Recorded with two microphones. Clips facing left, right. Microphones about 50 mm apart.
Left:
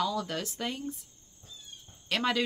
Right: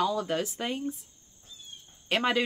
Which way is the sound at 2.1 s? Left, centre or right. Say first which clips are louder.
Right 2 dB; right.